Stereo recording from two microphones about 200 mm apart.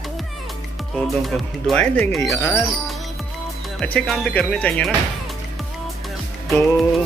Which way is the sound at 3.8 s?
5° left (ahead or behind).